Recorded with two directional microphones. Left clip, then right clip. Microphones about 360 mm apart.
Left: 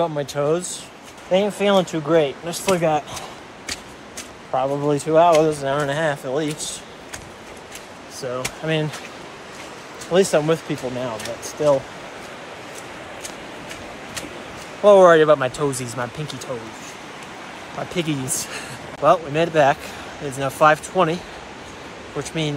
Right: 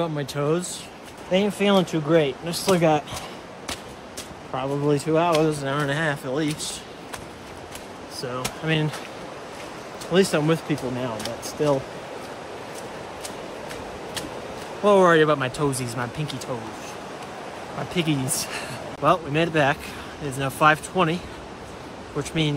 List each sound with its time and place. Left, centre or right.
0.0 s speech: centre
4.6 s speech: centre
8.2 s speech: centre
10.1 s speech: centre
14.9 s speech: centre
17.9 s speech: centre
22.2 s speech: centre